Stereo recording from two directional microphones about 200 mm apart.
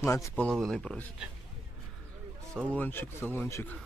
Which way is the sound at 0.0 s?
15° left (ahead or behind).